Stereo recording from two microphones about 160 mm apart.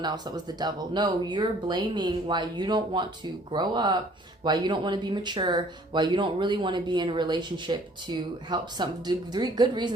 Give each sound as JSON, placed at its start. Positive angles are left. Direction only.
{"t": 0.0, "sound": "speech", "side_deg": -25}